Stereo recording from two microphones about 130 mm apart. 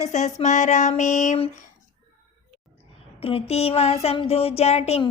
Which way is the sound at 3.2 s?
45° left (ahead or behind).